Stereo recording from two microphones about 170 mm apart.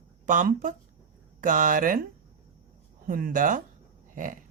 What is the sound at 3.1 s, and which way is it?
Speech, 55° right (ahead or behind).